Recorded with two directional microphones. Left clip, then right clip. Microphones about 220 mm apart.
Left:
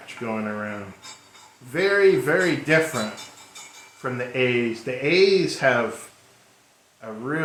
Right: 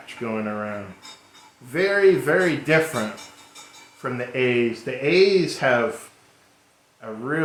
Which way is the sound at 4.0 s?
20° right (ahead or behind).